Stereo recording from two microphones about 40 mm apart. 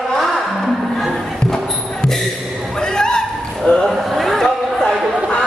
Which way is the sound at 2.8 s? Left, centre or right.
Centre.